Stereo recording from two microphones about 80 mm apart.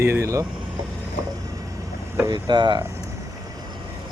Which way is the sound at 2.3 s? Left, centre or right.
Right.